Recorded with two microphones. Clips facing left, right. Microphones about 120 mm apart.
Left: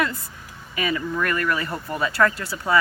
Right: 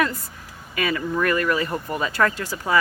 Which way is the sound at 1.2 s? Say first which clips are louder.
Right 5 dB; 30° right (ahead or behind).